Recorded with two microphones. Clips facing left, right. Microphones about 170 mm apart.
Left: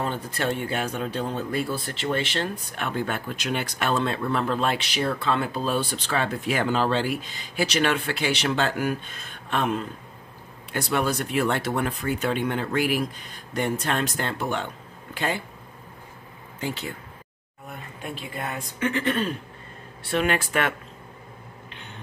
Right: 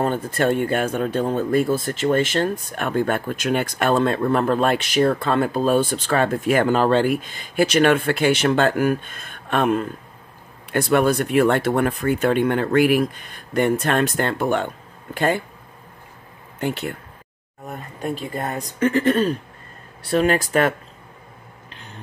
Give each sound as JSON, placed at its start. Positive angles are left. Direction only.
{"t": 0.0, "sound": "speech", "side_deg": -50}
{"t": 16.5, "sound": "speech", "side_deg": -60}
{"t": 17.6, "sound": "speech", "side_deg": -40}